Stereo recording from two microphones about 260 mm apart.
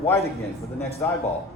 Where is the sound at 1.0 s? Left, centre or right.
Centre.